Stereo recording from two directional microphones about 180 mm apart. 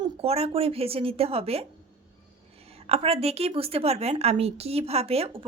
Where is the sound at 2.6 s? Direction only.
35° right (ahead or behind).